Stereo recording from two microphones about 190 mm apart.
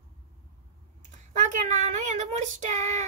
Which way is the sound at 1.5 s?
40° right (ahead or behind).